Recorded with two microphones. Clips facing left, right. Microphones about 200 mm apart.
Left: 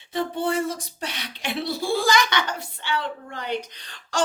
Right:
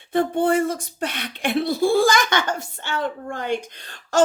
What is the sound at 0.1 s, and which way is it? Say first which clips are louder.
Speech: right 6 dB; 55° right (ahead or behind).